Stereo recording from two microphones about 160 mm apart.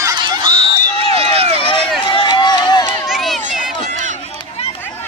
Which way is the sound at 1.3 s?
40° right (ahead or behind).